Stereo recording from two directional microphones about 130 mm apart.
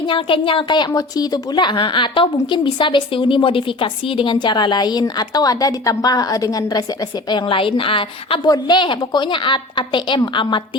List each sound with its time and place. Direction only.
0.1 s speech: 40° left (ahead or behind)
7.4 s a woman's voice: 45° left (ahead or behind)
8.4 s speech: 30° left (ahead or behind)